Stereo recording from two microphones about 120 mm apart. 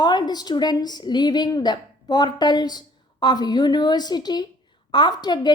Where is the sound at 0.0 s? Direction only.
35° left (ahead or behind).